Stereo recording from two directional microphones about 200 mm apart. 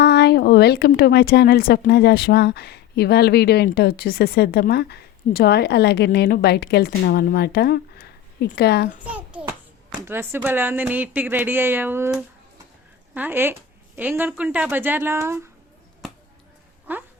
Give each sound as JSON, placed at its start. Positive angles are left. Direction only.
{"t": 0.0, "sound": "a woman's voice", "side_deg": 55}
{"t": 9.0, "sound": "a child's voice", "side_deg": -5}
{"t": 16.9, "sound": "speech", "side_deg": -10}